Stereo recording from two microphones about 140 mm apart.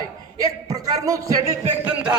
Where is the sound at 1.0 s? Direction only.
25° right (ahead or behind).